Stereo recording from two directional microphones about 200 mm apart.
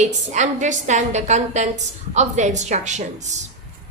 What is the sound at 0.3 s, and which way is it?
A woman's voice, 35° right (ahead or behind).